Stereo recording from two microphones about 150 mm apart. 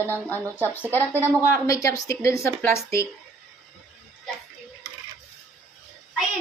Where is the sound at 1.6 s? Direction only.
20° left (ahead or behind).